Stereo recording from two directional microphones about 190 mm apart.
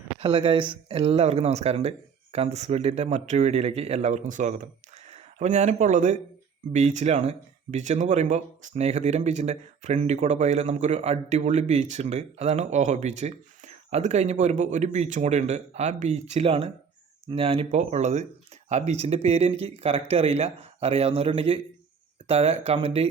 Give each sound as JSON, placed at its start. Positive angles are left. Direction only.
{"t": 0.2, "sound": "speech", "side_deg": -30}